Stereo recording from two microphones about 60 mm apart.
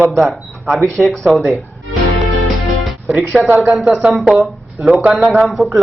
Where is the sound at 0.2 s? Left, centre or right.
Centre.